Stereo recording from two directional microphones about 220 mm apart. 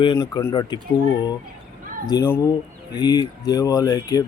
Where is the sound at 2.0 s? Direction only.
15° left (ahead or behind).